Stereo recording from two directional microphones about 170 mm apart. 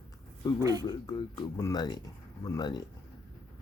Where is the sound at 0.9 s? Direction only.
25° left (ahead or behind).